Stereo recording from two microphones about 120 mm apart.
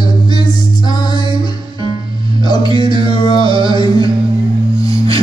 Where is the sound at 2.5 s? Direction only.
35° left (ahead or behind).